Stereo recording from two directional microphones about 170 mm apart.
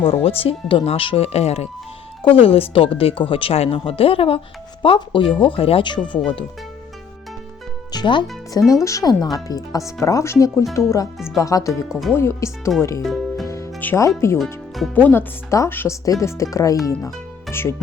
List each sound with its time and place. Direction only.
0.0 s speech: 35° left (ahead or behind)
7.9 s speech: 25° left (ahead or behind)
11.9 s speech: centre (ahead or behind)
12.1 s speech: 15° left (ahead or behind)
13.0 s music: centre (ahead or behind)
13.5 s music: 15° left (ahead or behind)
14.3 s speech: centre (ahead or behind)